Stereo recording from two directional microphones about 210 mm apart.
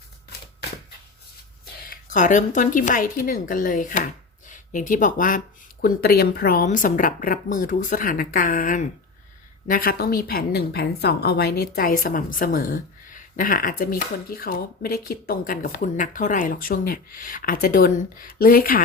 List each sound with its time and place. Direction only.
1.9 s a woman's voice: 35° left (ahead or behind)